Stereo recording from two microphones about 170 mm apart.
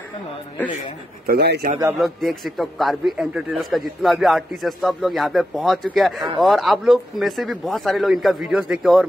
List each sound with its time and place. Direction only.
1.2 s speech: 70° right (ahead or behind)
2.0 s a man's voice: centre (ahead or behind)